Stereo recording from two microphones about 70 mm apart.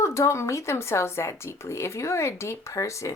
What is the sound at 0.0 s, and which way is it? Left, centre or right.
Speech, left.